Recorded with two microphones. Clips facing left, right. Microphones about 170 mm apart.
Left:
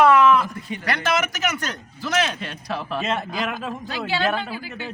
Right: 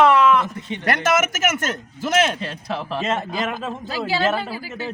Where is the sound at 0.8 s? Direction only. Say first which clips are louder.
Right 4 dB; 45° right (ahead or behind).